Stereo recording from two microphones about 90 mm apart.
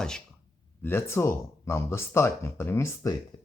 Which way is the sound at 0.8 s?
25° left (ahead or behind).